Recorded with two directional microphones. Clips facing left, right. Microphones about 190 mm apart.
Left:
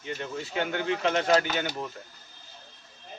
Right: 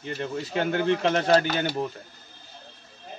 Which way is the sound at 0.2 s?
35° right (ahead or behind).